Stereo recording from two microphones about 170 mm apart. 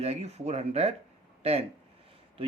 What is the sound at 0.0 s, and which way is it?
Speech, 40° right (ahead or behind).